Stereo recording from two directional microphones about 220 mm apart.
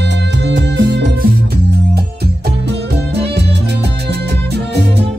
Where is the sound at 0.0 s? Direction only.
50° right (ahead or behind).